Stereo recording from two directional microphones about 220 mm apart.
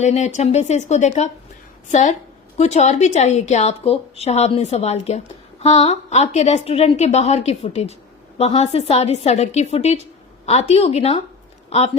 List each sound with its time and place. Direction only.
0.0 s a woman's voice: 30° left (ahead or behind)